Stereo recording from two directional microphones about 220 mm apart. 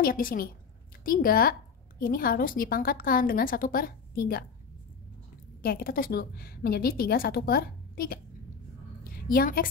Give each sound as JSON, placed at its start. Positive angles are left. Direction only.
{"t": 0.0, "sound": "a woman's voice", "side_deg": 40}
{"t": 5.6, "sound": "a woman's voice", "side_deg": 45}
{"t": 9.0, "sound": "a sound", "side_deg": 40}